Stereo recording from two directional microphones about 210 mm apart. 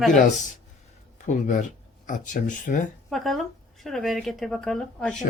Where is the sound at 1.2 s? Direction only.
35° left (ahead or behind).